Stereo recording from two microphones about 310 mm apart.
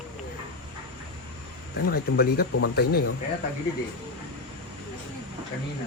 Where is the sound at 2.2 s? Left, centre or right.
Left.